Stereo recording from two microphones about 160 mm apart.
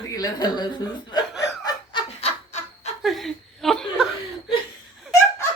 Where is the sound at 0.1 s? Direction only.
25° left (ahead or behind).